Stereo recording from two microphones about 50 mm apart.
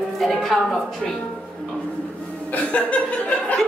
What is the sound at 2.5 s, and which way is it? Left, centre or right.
Chuckle, left.